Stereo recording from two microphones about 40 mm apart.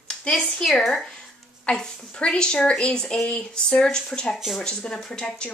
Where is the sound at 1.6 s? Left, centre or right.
Left.